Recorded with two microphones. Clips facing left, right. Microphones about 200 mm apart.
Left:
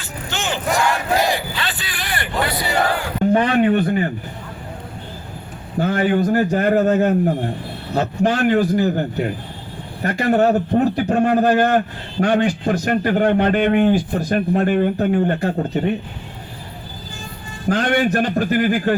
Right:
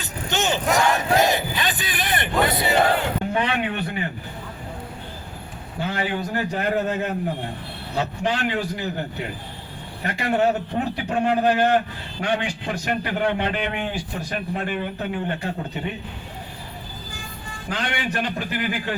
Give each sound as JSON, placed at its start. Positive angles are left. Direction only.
{"t": 0.0, "sound": "battle cry", "side_deg": -20}
{"t": 3.3, "sound": "a man's voice", "side_deg": 45}
{"t": 5.8, "sound": "a man's voice", "side_deg": 50}
{"t": 17.7, "sound": "a man's voice", "side_deg": 45}